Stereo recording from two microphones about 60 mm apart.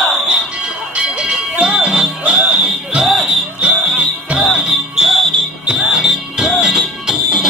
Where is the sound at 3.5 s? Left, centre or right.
Centre.